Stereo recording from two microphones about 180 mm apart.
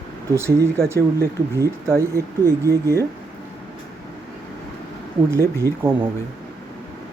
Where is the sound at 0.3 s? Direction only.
15° right (ahead or behind).